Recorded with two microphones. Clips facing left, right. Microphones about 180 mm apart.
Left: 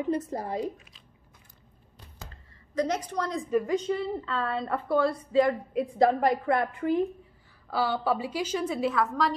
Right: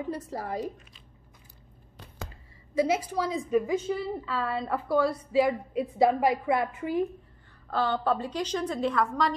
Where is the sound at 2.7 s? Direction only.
10° right (ahead or behind).